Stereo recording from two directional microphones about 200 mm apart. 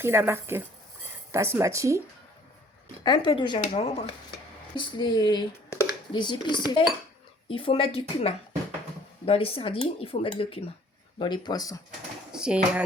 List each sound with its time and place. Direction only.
0.0 s speech: 10° right (ahead or behind)
3.0 s speech: 25° left (ahead or behind)
12.3 s speech: 5° right (ahead or behind)